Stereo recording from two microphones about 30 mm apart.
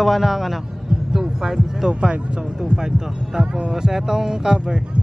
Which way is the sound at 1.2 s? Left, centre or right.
Centre.